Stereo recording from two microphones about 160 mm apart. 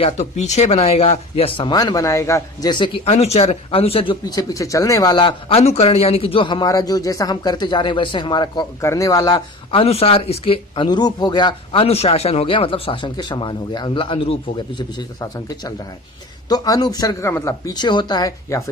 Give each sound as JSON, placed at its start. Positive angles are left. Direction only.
{"t": 0.0, "sound": "speech", "side_deg": 45}
{"t": 9.8, "sound": "speech", "side_deg": 40}